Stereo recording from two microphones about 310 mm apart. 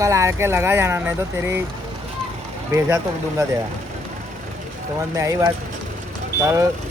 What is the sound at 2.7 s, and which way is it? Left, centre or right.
Speech, centre.